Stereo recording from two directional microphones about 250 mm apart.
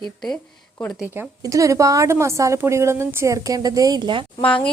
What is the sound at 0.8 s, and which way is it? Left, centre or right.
A woman's voice, centre.